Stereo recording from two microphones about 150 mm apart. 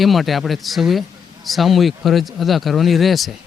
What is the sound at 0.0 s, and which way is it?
Speech, centre (ahead or behind).